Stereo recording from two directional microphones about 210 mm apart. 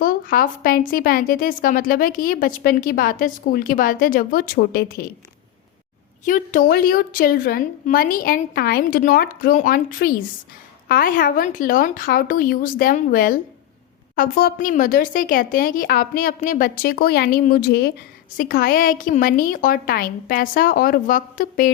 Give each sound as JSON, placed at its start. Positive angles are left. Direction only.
{"t": 0.0, "sound": "a woman's voice", "side_deg": 40}
{"t": 6.2, "sound": "a woman's voice", "side_deg": 40}